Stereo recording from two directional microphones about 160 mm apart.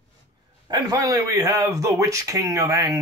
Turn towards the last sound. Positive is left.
turn(degrees=-20)  # may be behind; listen again after turning